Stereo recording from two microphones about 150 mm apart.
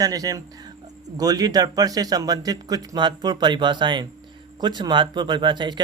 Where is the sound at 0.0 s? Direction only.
25° right (ahead or behind).